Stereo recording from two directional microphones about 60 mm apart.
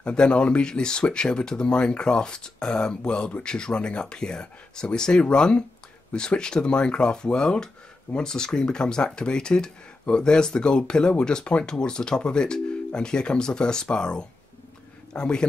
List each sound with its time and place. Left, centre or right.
0.0 s speech: centre